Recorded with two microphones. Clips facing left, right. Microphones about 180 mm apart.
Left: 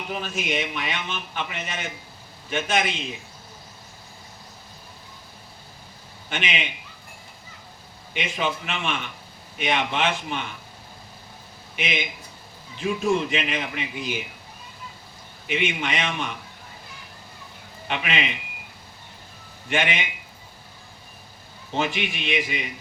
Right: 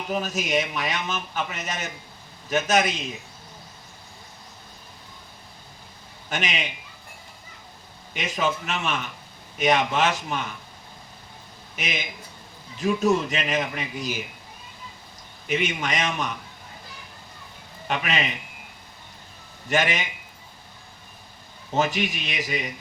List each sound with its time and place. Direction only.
0.1 s a man's voice: 40° right (ahead or behind)
6.3 s a man's voice: 40° right (ahead or behind)
8.1 s a man's voice: 40° right (ahead or behind)
11.8 s a man's voice: 40° right (ahead or behind)
15.4 s a man's voice: 40° right (ahead or behind)
17.8 s a man's voice: 40° right (ahead or behind)
19.6 s a man's voice: 40° right (ahead or behind)
21.8 s a man's voice: 40° right (ahead or behind)